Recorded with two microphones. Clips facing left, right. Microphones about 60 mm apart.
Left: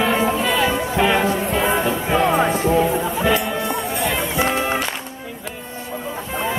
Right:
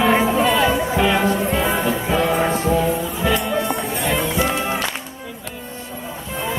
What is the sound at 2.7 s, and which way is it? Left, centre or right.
Music, left.